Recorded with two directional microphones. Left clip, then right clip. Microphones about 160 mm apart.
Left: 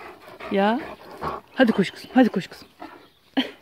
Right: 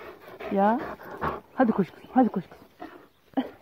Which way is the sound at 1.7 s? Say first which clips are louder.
Left 4 dB; 50° left (ahead or behind).